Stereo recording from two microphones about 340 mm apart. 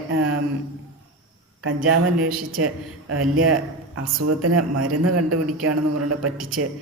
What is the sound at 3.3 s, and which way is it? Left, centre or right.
A man's voice, right.